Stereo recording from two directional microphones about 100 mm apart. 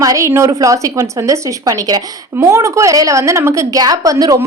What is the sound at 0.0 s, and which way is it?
A woman's voice, 35° right (ahead or behind).